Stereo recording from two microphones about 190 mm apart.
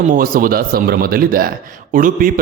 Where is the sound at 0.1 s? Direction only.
45° right (ahead or behind).